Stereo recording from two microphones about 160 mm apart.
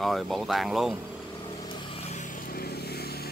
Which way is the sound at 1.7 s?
40° left (ahead or behind).